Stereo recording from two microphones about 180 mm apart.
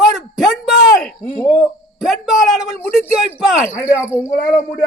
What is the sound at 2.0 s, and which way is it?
Speech, centre (ahead or behind).